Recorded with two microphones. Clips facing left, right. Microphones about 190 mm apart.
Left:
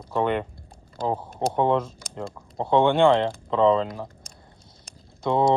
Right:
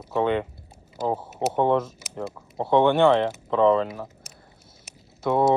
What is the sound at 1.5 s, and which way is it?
Speech, 15° left (ahead or behind).